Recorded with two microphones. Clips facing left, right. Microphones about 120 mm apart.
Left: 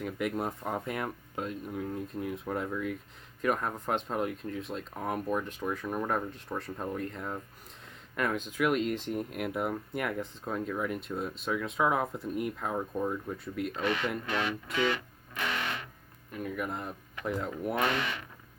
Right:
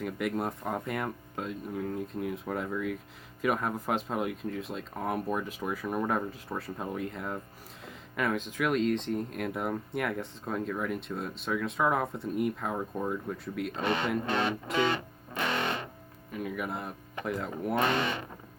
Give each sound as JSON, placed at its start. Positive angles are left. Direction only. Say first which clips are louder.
{"t": 0.0, "sound": "speech", "louder": "right 1 dB", "side_deg": 0}
{"t": 13.7, "sound": "speech", "louder": "right 1 dB", "side_deg": -30}
{"t": 14.2, "sound": "music", "louder": "right 3 dB", "side_deg": -30}
{"t": 16.3, "sound": "speech", "louder": "right 1 dB", "side_deg": -5}
{"t": 17.7, "sound": "speech", "louder": "right 3 dB", "side_deg": -30}